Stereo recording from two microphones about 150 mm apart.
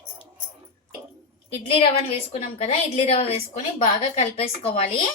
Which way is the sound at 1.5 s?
40° left (ahead or behind).